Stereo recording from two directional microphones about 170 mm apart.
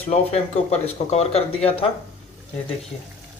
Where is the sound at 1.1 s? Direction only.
35° left (ahead or behind).